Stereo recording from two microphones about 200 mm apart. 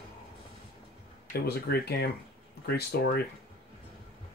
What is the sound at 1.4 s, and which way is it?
Speech, 50° left (ahead or behind).